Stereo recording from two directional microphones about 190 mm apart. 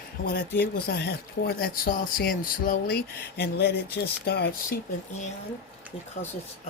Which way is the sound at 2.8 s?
65° left (ahead or behind).